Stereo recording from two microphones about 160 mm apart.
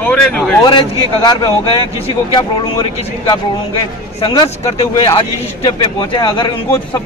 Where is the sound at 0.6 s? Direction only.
30° left (ahead or behind).